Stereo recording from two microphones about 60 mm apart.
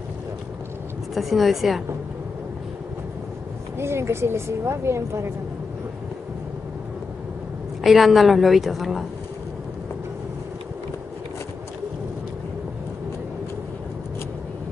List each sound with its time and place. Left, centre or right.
1.1 s a woman's voice: centre
3.7 s speech: right
7.8 s a woman's voice: centre